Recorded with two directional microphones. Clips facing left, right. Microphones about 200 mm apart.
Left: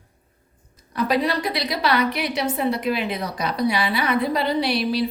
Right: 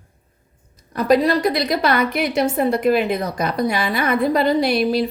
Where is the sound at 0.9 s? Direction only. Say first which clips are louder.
Right 6 dB; 45° right (ahead or behind).